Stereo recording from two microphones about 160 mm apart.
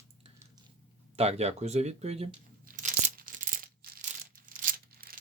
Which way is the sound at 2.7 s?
55° right (ahead or behind).